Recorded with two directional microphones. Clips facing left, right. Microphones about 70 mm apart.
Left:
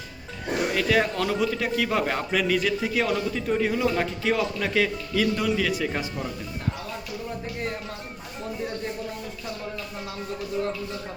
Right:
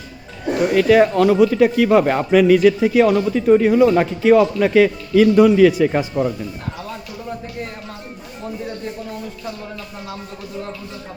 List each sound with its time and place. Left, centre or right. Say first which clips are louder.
0.7 s a man's voice: right 11 dB; centre
6.2 s speech: right 13 dB; right